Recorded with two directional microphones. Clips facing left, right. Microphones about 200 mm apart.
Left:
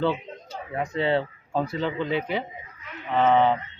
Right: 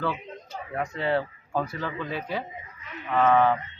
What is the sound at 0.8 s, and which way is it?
Speech, 25° left (ahead or behind).